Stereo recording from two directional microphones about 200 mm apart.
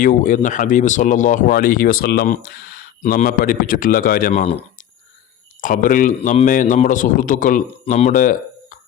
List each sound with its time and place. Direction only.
0.0 s speech: 40° left (ahead or behind)
5.5 s speech: 40° left (ahead or behind)